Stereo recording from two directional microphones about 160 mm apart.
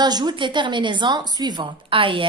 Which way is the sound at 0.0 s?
25° right (ahead or behind).